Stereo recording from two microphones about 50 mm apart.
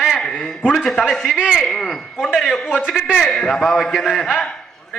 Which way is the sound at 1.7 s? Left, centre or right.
Centre.